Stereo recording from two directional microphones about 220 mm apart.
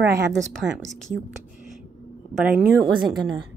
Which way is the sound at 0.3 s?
Centre (ahead or behind).